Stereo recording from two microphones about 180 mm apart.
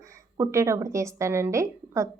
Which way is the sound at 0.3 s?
15° right (ahead or behind).